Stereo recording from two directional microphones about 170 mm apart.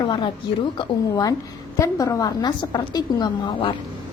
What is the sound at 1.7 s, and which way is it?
A woman's voice, 15° left (ahead or behind).